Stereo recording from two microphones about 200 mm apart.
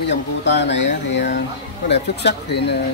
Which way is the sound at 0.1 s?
60° left (ahead or behind).